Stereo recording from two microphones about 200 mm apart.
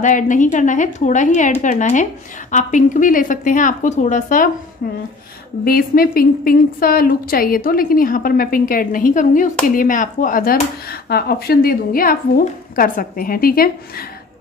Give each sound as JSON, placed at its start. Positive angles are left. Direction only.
{"t": 0.0, "sound": "a woman's voice", "side_deg": 40}
{"t": 5.7, "sound": "a woman's voice", "side_deg": 45}